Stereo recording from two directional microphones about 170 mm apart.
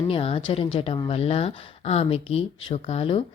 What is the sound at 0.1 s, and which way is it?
Speech, 35° left (ahead or behind).